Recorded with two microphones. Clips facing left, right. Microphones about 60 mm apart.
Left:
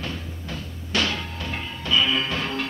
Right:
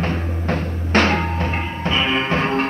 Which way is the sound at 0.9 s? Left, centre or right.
Right.